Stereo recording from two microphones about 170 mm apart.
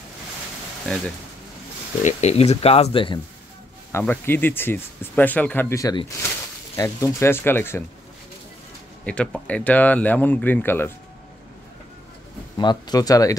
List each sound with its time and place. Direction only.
0.8 s speech: 5° left (ahead or behind)
2.0 s speech: 40° left (ahead or behind)
3.9 s speech: 10° left (ahead or behind)
9.0 s speech: 5° left (ahead or behind)
12.5 s speech: 25° left (ahead or behind)